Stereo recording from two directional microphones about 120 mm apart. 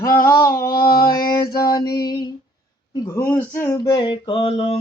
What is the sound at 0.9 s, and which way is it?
Music, 35° left (ahead or behind).